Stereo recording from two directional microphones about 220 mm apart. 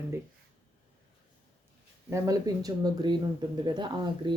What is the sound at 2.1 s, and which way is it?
Speech, 15° right (ahead or behind).